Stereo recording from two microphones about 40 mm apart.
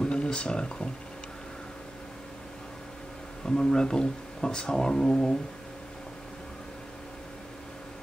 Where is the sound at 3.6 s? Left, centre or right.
Centre.